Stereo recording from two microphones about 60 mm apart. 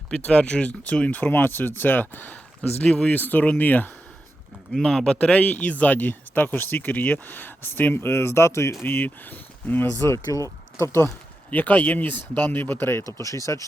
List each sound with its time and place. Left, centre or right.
0.1 s speech: centre
4.7 s speech: centre; by 8.7 s left
8.8 s speech: left
10.3 s speech: left
11.5 s speech: left
13.1 s speech: left